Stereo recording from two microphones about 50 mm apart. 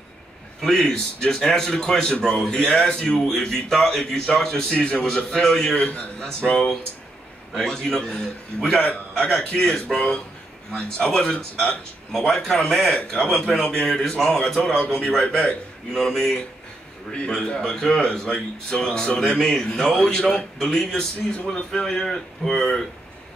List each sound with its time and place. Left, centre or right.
0.8 s speech: centre
5.8 s a man's voice: left